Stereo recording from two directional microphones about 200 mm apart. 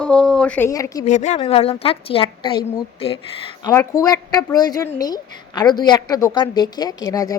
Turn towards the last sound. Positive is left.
turn(degrees=15)  # may be behind; listen again after turning